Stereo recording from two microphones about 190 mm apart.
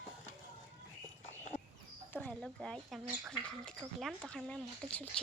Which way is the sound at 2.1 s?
5° left (ahead or behind).